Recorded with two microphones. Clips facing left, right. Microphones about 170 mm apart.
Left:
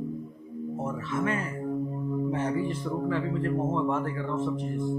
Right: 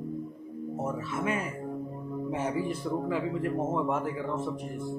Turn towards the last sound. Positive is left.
turn(degrees=-10)  # may be behind; listen again after turning